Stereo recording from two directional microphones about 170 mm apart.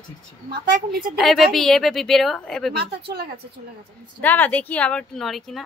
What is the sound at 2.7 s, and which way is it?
Speech, 70° right (ahead or behind).